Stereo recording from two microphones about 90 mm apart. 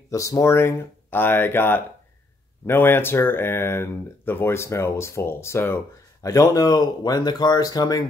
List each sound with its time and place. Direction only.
0.1 s speech: 40° left (ahead or behind)